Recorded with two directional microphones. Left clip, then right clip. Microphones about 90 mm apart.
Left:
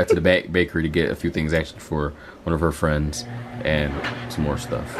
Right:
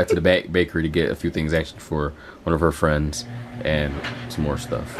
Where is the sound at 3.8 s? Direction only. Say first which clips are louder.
Left 2 dB; 25° left (ahead or behind).